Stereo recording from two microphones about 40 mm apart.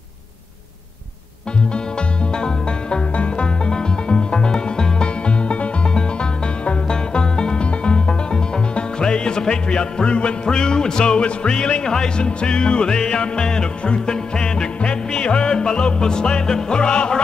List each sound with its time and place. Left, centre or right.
2.3 s music: left